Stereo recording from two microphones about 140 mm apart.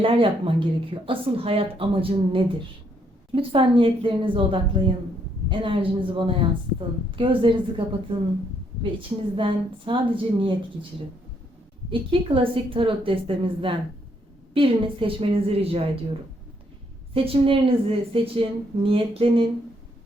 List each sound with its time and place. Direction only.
0.0 s speech: 40° right (ahead or behind)
11.9 s a woman's voice: 40° right (ahead or behind)
17.2 s speech: 40° right (ahead or behind)